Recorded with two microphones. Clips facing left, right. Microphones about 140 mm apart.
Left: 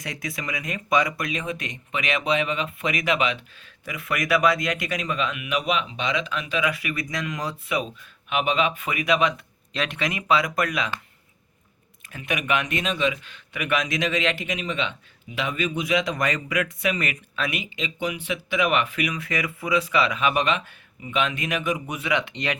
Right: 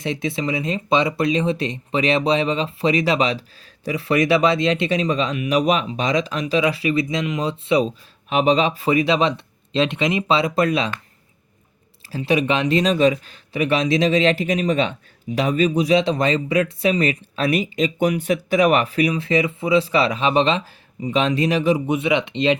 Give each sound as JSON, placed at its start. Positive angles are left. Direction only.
{"t": 0.0, "sound": "speech", "side_deg": -25}
{"t": 12.1, "sound": "speech", "side_deg": -30}